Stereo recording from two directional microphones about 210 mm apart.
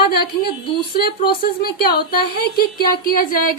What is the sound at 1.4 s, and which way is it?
A woman's voice, 45° left (ahead or behind).